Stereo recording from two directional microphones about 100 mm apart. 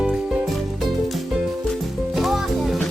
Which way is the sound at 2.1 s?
5° right (ahead or behind).